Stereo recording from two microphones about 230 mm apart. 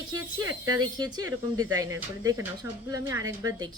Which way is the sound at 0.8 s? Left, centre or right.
Centre.